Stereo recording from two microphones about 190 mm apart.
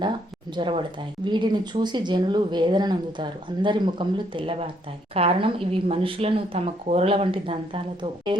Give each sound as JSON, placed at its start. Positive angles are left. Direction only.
{"t": 0.5, "sound": "speech", "side_deg": -25}